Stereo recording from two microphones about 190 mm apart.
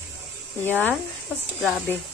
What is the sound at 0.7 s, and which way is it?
Speech, 10° left (ahead or behind).